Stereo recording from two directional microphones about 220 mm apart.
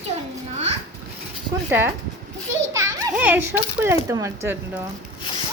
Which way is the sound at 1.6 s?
10° right (ahead or behind).